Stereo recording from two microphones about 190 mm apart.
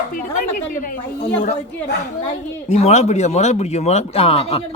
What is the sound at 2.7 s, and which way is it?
Speech, 35° left (ahead or behind).